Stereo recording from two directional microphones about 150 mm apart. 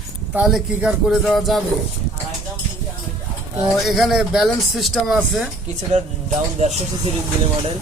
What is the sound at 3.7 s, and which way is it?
Speech, centre (ahead or behind).